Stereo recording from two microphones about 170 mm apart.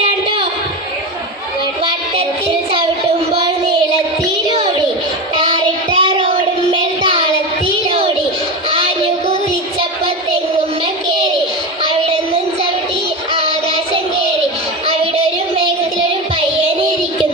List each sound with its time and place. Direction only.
6.0 s music: 30° right (ahead or behind)
7.9 s child singing: 35° right (ahead or behind)
8.7 s music: 35° right (ahead or behind)
11.8 s child singing: 30° right (ahead or behind)
14.8 s child singing: 35° right (ahead or behind)